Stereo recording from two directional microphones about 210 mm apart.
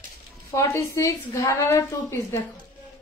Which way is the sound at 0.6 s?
15° left (ahead or behind).